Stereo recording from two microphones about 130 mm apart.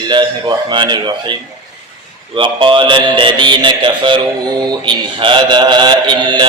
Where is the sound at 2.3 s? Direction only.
40° right (ahead or behind).